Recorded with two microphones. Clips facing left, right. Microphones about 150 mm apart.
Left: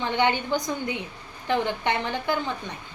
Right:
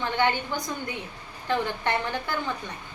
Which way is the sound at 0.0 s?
20° left (ahead or behind).